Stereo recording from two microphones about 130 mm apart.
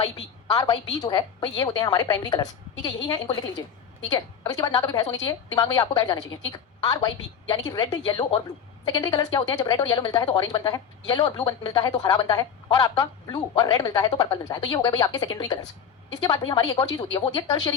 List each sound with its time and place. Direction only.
0.5 s a woman's voice: 30° left (ahead or behind)